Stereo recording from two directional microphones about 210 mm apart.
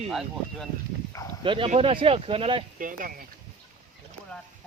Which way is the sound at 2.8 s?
40° right (ahead or behind).